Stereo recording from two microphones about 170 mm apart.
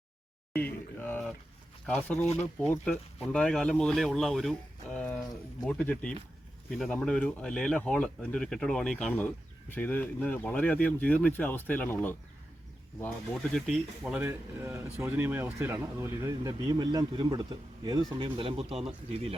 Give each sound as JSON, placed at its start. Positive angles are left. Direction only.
{"t": 0.5, "sound": "speech", "side_deg": 10}
{"t": 13.5, "sound": "speech", "side_deg": 0}